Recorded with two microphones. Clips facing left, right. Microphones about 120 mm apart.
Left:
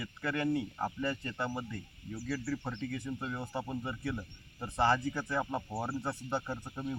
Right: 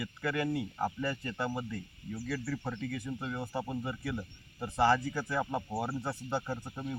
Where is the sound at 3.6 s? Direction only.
10° right (ahead or behind).